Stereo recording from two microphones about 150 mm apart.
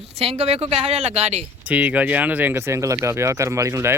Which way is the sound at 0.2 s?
40° right (ahead or behind).